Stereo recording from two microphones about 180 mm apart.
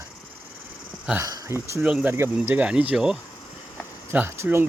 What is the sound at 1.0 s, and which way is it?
Speech, 15° right (ahead or behind).